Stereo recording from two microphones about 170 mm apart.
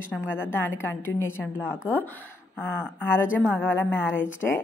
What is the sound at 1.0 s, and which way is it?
A woman's voice, 10° left (ahead or behind).